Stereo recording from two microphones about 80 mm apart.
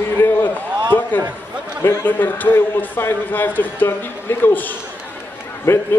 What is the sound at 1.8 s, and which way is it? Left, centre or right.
A man's voice, left.